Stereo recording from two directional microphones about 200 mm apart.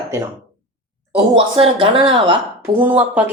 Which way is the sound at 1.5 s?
25° right (ahead or behind).